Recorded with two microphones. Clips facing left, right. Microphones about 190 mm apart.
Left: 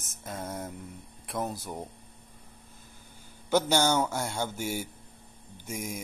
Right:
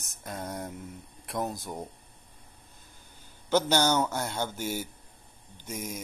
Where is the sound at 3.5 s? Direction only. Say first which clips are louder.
Even; 10° left (ahead or behind).